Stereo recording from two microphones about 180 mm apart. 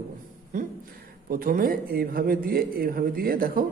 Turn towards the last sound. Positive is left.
turn(degrees=-55)  # may be behind; listen again after turning